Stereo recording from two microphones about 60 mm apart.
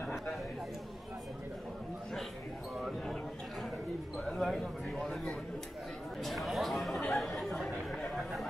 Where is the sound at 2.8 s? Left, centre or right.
Centre.